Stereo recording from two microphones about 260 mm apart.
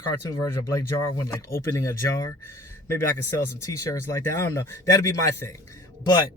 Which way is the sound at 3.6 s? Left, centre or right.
Centre.